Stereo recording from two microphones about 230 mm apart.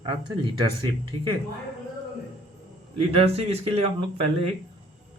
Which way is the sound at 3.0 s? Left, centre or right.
Right.